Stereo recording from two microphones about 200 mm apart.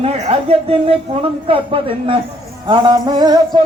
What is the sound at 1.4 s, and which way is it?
Music, 25° right (ahead or behind).